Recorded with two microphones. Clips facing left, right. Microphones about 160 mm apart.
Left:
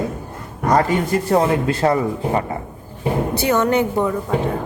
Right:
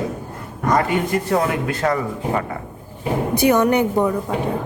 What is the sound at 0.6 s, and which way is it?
A man's voice, 35° left (ahead or behind).